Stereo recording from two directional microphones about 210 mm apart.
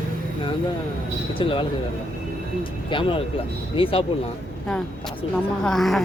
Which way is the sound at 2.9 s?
25° left (ahead or behind).